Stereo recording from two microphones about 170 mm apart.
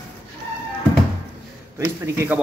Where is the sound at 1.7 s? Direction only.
15° right (ahead or behind).